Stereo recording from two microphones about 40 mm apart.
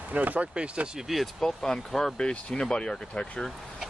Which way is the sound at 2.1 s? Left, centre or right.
Left.